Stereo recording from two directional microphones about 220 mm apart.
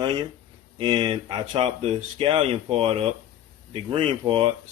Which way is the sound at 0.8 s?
20° right (ahead or behind).